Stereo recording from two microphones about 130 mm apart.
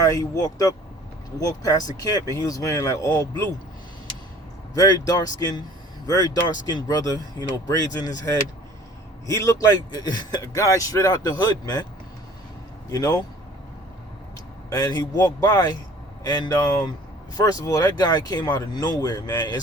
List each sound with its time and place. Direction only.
0.0 s a man's voice: 30° left (ahead or behind)
4.7 s a man's voice: 30° left (ahead or behind)
12.9 s a man's voice: 30° left (ahead or behind)
14.7 s a man's voice: 30° left (ahead or behind)